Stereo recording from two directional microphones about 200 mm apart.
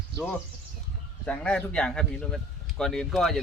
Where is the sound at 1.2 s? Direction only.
5° left (ahead or behind).